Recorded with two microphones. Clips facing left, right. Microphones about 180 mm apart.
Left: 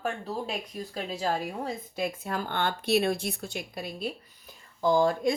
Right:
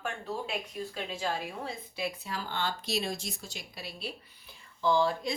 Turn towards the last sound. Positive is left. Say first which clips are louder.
# left 4 dB
turn(degrees=45)  # may be behind; listen again after turning